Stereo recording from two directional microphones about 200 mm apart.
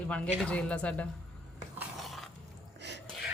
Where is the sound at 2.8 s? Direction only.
60° right (ahead or behind).